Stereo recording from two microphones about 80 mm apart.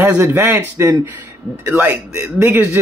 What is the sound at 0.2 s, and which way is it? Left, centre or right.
A man's voice, right.